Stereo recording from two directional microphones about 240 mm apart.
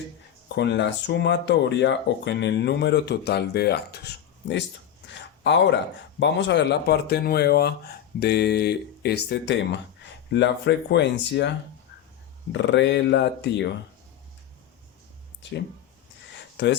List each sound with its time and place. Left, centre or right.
0.4 s speech: left
16.6 s speech: left